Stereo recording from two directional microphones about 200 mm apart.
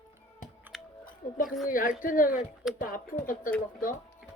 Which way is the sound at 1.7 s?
40° left (ahead or behind).